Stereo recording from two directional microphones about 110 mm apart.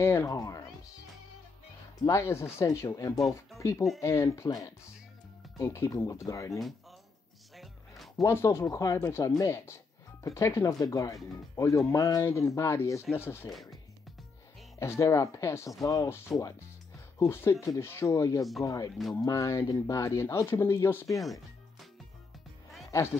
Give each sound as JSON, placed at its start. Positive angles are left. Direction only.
{"t": 0.0, "sound": "speech", "side_deg": 25}
{"t": 0.3, "sound": "speech", "side_deg": 35}
{"t": 2.0, "sound": "speech", "side_deg": 25}
{"t": 7.5, "sound": "music", "side_deg": 0}
{"t": 8.2, "sound": "speech", "side_deg": 25}
{"t": 13.5, "sound": "speech", "side_deg": 0}
{"t": 14.8, "sound": "speech", "side_deg": 25}
{"t": 22.8, "sound": "speech", "side_deg": 25}